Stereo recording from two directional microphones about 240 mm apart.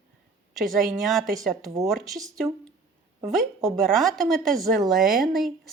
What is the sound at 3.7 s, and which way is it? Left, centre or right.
A woman's voice, centre.